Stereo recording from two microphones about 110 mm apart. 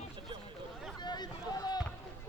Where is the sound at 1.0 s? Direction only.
40° left (ahead or behind).